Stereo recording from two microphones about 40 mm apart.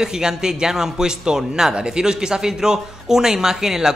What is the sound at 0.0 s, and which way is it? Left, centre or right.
Speech, centre.